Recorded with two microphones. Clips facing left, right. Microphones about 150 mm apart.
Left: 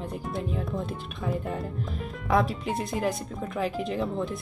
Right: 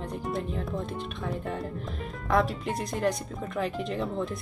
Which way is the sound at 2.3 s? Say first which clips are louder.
Left 1 dB; centre (ahead or behind).